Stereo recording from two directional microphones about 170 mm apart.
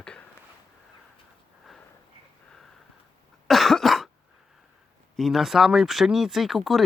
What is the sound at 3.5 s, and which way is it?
Cough, centre (ahead or behind).